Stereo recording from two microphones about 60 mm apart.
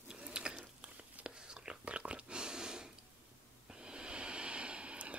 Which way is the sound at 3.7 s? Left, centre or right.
Centre.